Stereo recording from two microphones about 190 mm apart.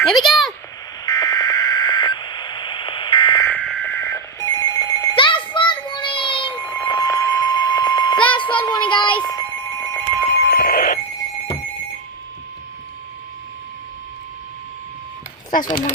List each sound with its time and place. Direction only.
0.0 s speech: centre (ahead or behind)
1.0 s radio: 20° left (ahead or behind)
3.4 s telephone bell ringing: 10° left (ahead or behind); by 6.5 s 25° left (ahead or behind)
6.5 s alarm clock: 20° left (ahead or behind)
8.4 s child singing: 25° left (ahead or behind)
9.2 s alarm clock: 15° left (ahead or behind)
10.3 s alarm clock: 60° left (ahead or behind)